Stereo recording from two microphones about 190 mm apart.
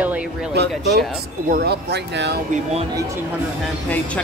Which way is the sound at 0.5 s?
60° right (ahead or behind).